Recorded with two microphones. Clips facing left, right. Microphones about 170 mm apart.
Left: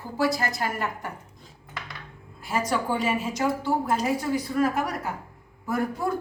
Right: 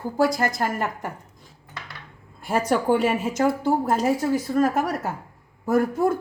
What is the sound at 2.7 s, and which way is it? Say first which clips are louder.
Speech: right 6 dB; 55° right (ahead or behind).